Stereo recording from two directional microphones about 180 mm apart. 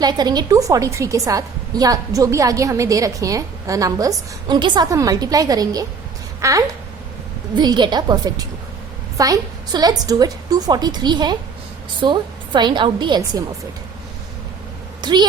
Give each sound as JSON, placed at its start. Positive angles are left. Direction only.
{"t": 0.0, "sound": "a woman's voice", "side_deg": -20}
{"t": 15.0, "sound": "a woman's voice", "side_deg": -25}